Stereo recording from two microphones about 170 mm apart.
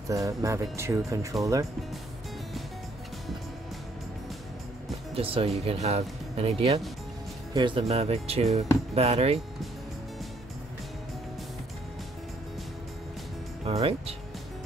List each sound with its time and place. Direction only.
0.1 s speech: 20° right (ahead or behind)
5.1 s speech: 35° right (ahead or behind)
13.7 s speech: 35° right (ahead or behind)